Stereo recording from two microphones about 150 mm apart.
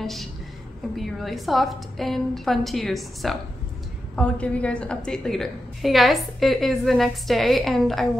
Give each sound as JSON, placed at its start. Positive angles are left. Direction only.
{"t": 0.0, "sound": "a woman's voice", "side_deg": 0}